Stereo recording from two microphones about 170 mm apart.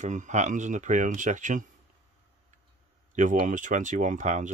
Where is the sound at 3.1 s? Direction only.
50° right (ahead or behind).